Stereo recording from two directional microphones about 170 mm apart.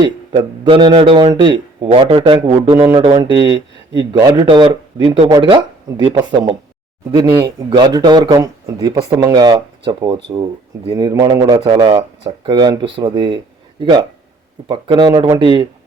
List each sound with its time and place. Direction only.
0.0 s speech: 30° right (ahead or behind)